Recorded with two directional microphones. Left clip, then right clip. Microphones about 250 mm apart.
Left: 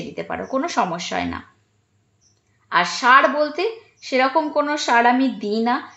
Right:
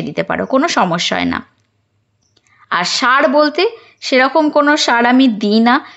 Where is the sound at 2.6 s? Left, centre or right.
Right.